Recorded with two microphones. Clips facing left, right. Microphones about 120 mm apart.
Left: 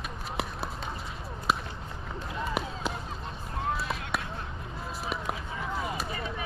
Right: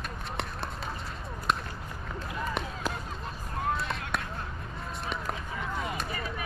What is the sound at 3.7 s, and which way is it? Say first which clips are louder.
Basketball bounce: even; centre (ahead or behind).